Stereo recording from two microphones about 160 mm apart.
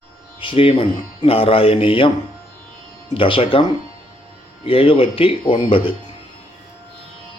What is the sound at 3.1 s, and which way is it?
Speech, 35° left (ahead or behind).